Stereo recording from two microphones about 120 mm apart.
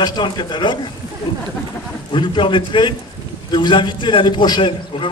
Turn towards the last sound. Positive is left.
turn(degrees=40)  # may be behind; listen again after turning